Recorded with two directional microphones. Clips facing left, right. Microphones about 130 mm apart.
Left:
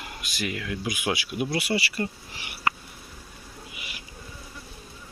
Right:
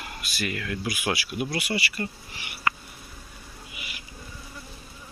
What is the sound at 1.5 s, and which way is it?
Speech, 30° left (ahead or behind).